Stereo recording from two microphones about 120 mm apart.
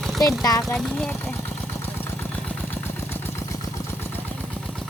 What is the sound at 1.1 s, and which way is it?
Vehicle, 15° left (ahead or behind).